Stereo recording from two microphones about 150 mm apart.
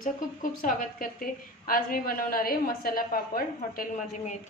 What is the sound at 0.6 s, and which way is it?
A woman's voice, 65° left (ahead or behind).